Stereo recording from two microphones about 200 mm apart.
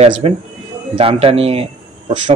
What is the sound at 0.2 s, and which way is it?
A man's voice, 30° right (ahead or behind).